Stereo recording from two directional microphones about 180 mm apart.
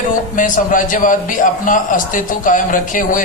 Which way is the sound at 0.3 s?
45° left (ahead or behind).